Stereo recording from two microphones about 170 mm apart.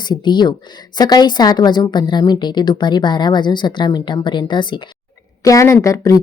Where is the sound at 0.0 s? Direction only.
25° left (ahead or behind).